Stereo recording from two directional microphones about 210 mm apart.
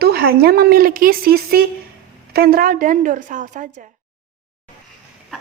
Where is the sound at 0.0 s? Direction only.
45° right (ahead or behind).